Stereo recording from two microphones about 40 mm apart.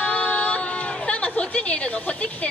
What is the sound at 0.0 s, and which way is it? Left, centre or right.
Chatter, left.